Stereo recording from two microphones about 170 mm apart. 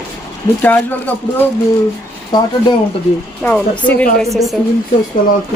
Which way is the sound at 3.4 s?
10° left (ahead or behind).